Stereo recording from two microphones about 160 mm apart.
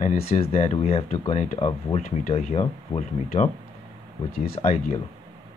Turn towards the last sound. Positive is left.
turn(degrees=45)  # may be behind; listen again after turning